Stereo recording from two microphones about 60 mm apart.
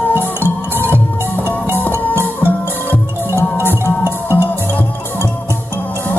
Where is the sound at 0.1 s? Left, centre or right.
Right.